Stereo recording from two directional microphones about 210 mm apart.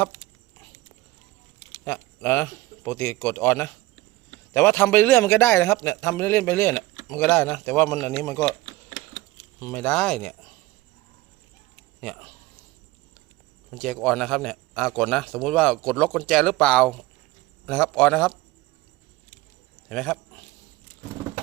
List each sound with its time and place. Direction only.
1.8 s a man's voice: 10° left (ahead or behind)
9.6 s a man's voice: 10° left (ahead or behind)
11.9 s speech: 5° left (ahead or behind)
13.7 s a man's voice: 5° left (ahead or behind)
19.9 s a man's voice: 5° left (ahead or behind)